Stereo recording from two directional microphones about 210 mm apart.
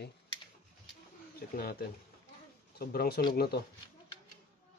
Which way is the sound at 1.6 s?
50° left (ahead or behind).